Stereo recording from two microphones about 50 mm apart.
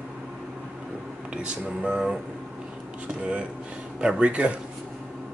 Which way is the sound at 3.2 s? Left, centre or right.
Right.